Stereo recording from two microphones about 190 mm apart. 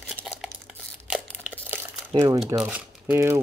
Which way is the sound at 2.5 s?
5° right (ahead or behind).